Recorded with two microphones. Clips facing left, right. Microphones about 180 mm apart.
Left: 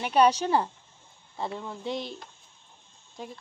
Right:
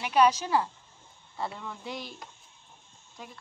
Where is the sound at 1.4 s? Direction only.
25° left (ahead or behind).